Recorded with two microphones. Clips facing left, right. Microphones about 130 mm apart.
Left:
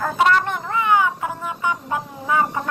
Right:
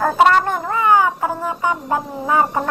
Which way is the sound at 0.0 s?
50° right (ahead or behind).